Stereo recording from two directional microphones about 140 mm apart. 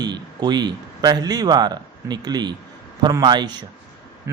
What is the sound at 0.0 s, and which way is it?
A man's voice, 30° right (ahead or behind).